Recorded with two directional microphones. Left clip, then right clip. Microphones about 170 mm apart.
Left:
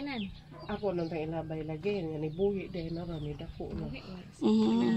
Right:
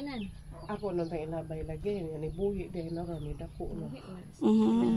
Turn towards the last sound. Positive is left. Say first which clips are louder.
# right 1 dB
turn(degrees=-10)  # may be behind; listen again after turning